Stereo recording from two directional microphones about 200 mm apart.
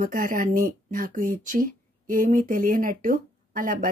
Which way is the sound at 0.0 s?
45° right (ahead or behind).